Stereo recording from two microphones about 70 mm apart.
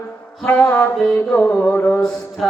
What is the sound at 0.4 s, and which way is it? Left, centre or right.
Music, left.